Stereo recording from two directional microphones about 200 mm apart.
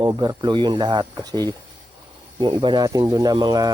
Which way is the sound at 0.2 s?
25° right (ahead or behind).